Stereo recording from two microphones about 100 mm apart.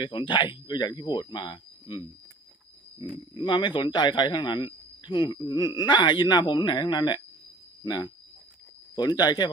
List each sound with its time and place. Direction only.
0.0 s speech: 50° left (ahead or behind)
3.3 s speech: 55° left (ahead or behind)